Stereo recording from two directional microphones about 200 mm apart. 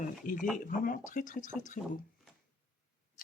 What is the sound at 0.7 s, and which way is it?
Speech, 45° left (ahead or behind).